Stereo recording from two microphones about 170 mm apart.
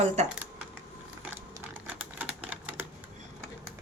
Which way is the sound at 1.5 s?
10° right (ahead or behind).